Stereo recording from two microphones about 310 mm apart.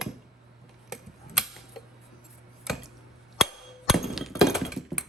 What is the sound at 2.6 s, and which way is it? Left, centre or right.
Chopping, centre.